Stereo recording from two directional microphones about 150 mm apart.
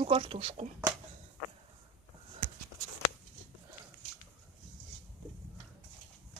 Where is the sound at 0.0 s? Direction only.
40° right (ahead or behind).